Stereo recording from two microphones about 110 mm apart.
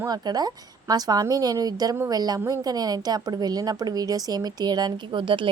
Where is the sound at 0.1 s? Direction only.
40° right (ahead or behind).